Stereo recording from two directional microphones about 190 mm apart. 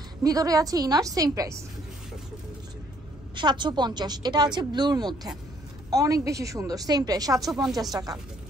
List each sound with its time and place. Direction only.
0.2 s a woman's voice: 20° right (ahead or behind)
3.3 s a woman's voice: 25° right (ahead or behind)
7.3 s speech: centre (ahead or behind)
7.9 s a woman's voice: 20° right (ahead or behind)